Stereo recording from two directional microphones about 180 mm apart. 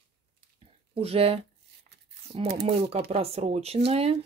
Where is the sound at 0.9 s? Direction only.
35° right (ahead or behind).